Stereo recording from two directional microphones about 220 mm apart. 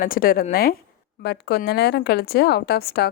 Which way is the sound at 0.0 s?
40° left (ahead or behind).